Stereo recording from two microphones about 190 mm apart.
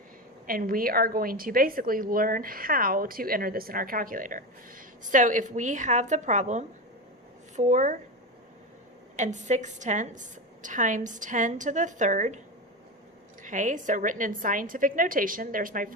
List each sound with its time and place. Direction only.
0.4 s a woman's voice: 50° right (ahead or behind)
9.1 s a woman's voice: 40° right (ahead or behind)
13.4 s a woman's voice: 40° right (ahead or behind)